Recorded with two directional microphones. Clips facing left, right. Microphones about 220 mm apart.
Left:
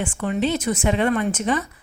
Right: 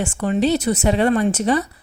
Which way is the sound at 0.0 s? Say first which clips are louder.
Right 4 dB; 40° right (ahead or behind).